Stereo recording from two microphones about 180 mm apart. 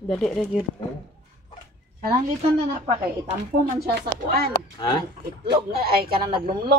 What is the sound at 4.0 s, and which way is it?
A man's voice, 60° right (ahead or behind).